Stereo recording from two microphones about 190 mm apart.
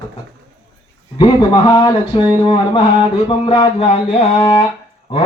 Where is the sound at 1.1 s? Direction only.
25° left (ahead or behind).